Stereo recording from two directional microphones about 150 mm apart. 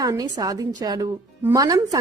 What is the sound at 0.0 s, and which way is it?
A woman's voice, 25° right (ahead or behind).